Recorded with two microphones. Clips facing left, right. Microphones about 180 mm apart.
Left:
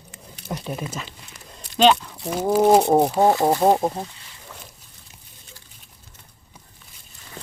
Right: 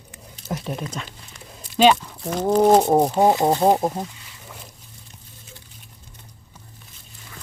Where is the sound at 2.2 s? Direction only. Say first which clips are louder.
Right 1 dB; 10° left (ahead or behind).